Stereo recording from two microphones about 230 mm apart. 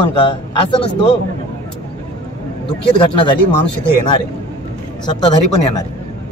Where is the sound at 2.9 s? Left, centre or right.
Left.